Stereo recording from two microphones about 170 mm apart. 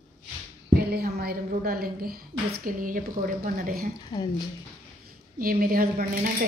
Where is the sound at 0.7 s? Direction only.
65° right (ahead or behind).